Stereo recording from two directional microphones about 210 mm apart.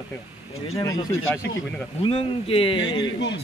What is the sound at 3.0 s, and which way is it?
Speech, 60° left (ahead or behind).